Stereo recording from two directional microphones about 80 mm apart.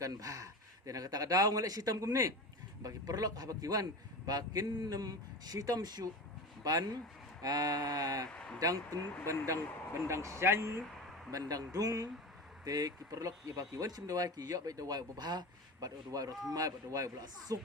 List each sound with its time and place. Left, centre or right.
0.0 s speech: right
8.3 s a sound: centre
8.5 s speech: right
11.3 s speech: right